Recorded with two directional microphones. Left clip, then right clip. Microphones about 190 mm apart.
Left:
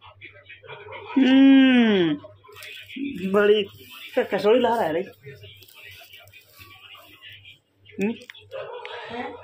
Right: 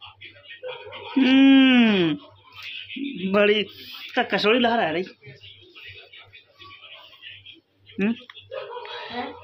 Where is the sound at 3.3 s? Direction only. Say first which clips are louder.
Left 1 dB; 30° right (ahead or behind).